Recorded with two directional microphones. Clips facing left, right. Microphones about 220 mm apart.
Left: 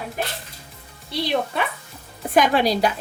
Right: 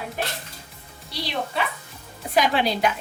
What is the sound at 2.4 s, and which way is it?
Speech, 40° left (ahead or behind).